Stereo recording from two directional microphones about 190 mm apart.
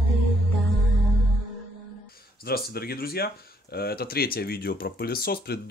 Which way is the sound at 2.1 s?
55° left (ahead or behind).